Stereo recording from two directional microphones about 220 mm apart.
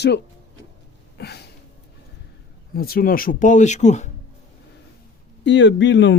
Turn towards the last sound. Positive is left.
turn(degrees=55)  # may be behind; listen again after turning